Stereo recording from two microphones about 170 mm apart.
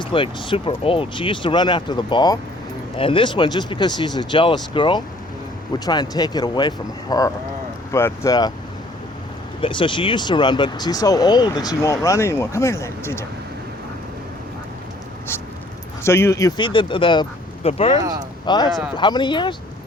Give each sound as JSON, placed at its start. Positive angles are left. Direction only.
{"t": 0.0, "sound": "speech", "side_deg": 30}
{"t": 9.6, "sound": "speech", "side_deg": 30}
{"t": 16.0, "sound": "speech", "side_deg": 15}
{"t": 18.4, "sound": "speech", "side_deg": 25}